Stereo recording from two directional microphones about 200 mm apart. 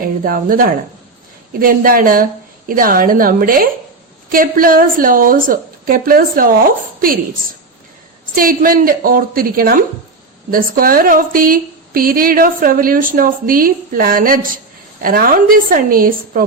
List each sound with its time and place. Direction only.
0.3 s a woman's voice: 45° right (ahead or behind)
8.4 s a woman's voice: 45° right (ahead or behind)